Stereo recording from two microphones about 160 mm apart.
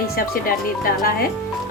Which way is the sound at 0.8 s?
65° left (ahead or behind).